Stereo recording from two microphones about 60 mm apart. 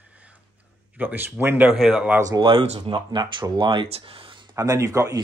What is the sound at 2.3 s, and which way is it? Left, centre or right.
Speech, right.